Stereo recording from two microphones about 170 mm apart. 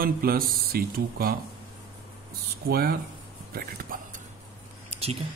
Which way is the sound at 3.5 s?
55° right (ahead or behind).